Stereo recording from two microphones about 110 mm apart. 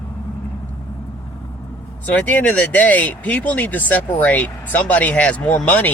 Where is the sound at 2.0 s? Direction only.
15° left (ahead or behind).